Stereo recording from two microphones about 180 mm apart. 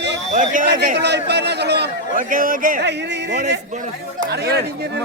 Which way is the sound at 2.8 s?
70° right (ahead or behind).